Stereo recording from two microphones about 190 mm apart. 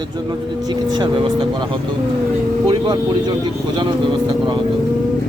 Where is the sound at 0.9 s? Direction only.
25° right (ahead or behind).